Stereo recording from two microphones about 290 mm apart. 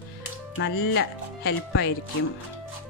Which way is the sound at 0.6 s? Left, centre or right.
Left.